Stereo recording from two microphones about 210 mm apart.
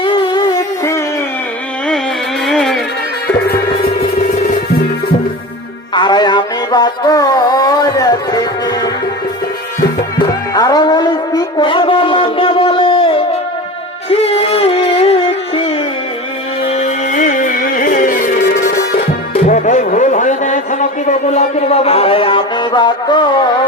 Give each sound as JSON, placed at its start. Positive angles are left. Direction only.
{"t": 0.0, "sound": "a sound", "side_deg": 25}
{"t": 2.5, "sound": "music", "side_deg": 0}
{"t": 5.9, "sound": "music", "side_deg": 20}
{"t": 10.5, "sound": "a sound", "side_deg": 20}
{"t": 14.1, "sound": "music", "side_deg": 30}
{"t": 19.3, "sound": "music", "side_deg": 35}